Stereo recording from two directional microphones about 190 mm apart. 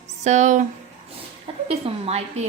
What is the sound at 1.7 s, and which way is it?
Speech, 35° right (ahead or behind).